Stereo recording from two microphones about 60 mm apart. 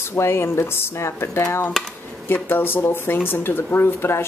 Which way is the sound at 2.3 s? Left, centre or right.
Left.